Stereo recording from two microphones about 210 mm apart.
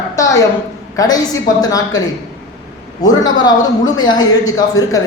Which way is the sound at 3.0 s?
20° left (ahead or behind).